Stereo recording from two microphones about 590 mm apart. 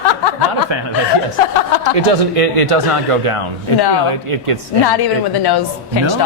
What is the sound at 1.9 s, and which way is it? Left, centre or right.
Speech, right.